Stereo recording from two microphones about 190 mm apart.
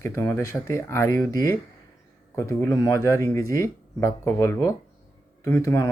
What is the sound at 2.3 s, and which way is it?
Speech, 15° left (ahead or behind).